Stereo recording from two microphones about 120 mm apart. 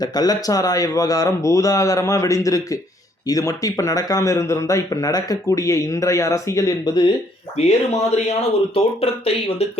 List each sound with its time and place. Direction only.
0.0 s speech: 30° left (ahead or behind)
7.5 s speech: 60° left (ahead or behind)